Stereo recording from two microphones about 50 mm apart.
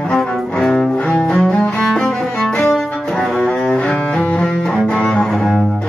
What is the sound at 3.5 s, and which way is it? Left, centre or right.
Cello, centre.